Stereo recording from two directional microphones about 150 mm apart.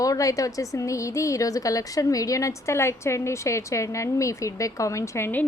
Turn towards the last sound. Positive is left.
turn(degrees=15)  # may be behind; listen again after turning